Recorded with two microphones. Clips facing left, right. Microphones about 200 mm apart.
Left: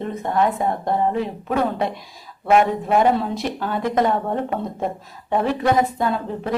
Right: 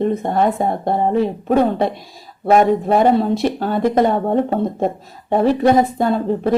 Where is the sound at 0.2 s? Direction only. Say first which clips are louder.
Right 3 dB; 30° right (ahead or behind).